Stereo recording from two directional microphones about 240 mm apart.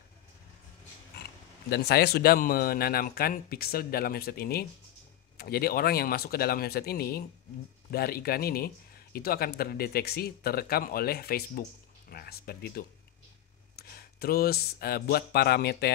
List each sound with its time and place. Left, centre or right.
1.7 s speech: left